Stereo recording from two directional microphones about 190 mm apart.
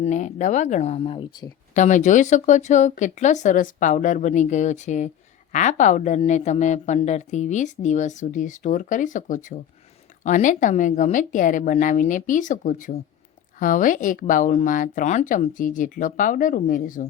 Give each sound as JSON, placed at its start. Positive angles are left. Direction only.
{"t": 0.0, "sound": "speech", "side_deg": 40}
{"t": 1.7, "sound": "speech", "side_deg": 40}